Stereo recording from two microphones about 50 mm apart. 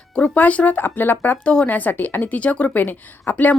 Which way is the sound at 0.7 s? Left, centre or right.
Left.